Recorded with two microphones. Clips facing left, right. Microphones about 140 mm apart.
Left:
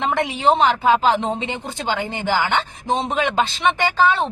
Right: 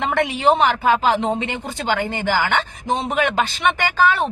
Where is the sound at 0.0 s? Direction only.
20° left (ahead or behind).